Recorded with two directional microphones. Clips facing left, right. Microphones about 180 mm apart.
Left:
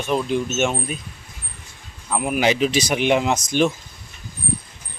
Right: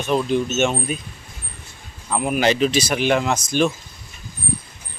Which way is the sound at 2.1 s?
5° left (ahead or behind).